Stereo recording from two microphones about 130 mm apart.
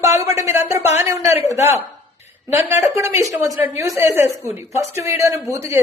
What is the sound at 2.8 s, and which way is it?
A man's voice, 20° right (ahead or behind).